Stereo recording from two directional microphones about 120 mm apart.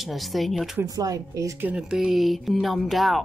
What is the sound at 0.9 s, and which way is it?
Speech, 30° right (ahead or behind).